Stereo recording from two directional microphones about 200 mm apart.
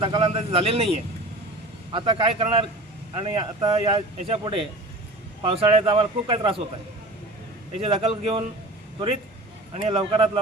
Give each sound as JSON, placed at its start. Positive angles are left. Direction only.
{"t": 0.0, "sound": "speech", "side_deg": -25}
{"t": 7.8, "sound": "speech", "side_deg": -25}
{"t": 9.7, "sound": "speech", "side_deg": -25}